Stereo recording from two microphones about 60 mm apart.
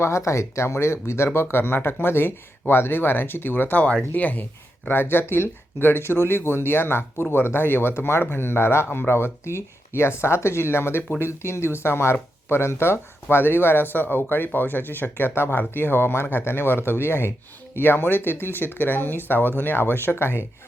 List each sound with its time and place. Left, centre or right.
0.0 s speech: left
4.9 s speech: left